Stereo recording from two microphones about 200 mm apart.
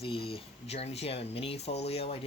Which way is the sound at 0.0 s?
30° left (ahead or behind).